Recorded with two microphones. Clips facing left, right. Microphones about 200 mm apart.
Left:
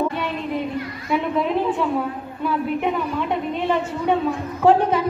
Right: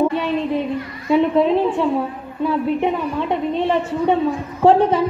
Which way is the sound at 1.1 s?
30° right (ahead or behind).